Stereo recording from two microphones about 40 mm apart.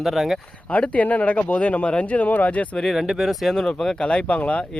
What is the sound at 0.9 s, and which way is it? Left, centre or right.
Speech, left.